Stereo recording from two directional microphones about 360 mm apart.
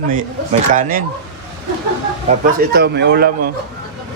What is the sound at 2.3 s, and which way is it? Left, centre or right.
Speech, right.